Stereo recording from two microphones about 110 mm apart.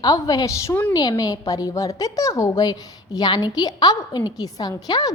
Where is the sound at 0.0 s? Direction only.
35° left (ahead or behind).